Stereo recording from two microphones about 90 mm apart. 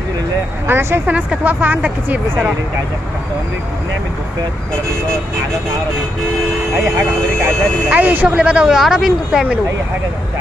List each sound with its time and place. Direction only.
0.7 s speech: 25° right (ahead or behind)
1.0 s speech: 15° right (ahead or behind)
7.0 s speech: 25° right (ahead or behind); by 9.6 s 5° right (ahead or behind)